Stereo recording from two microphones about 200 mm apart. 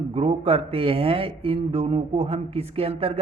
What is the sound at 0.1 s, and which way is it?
A man's voice, 30° right (ahead or behind).